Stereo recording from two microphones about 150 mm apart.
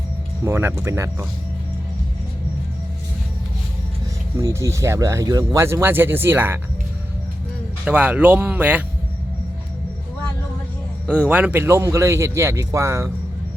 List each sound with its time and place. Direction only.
0.4 s speech: 15° right (ahead or behind)
4.4 s speech: 20° right (ahead or behind)
7.9 s speech: 10° right (ahead or behind)
11.1 s speech: 10° right (ahead or behind)